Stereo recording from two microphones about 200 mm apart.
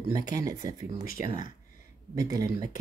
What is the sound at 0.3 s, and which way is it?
Speech, 15° right (ahead or behind).